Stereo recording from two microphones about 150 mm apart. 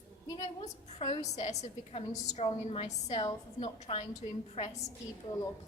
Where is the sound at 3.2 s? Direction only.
30° left (ahead or behind).